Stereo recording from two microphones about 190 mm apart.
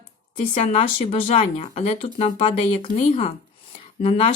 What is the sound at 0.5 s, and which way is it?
Speech, 30° left (ahead or behind).